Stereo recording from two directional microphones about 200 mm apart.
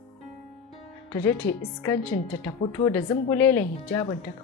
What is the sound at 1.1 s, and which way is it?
Speech, 10° left (ahead or behind).